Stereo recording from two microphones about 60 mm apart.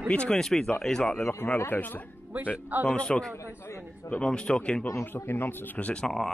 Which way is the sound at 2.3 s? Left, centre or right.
Right.